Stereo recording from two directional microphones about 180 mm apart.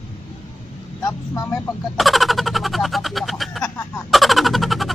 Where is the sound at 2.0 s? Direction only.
Centre (ahead or behind).